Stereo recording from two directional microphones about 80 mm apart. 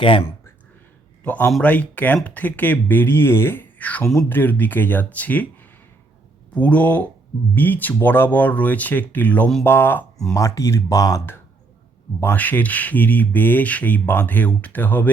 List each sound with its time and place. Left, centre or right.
1.2 s a man's voice: centre
6.5 s speech: centre
10.3 s speech: left
12.2 s speech: left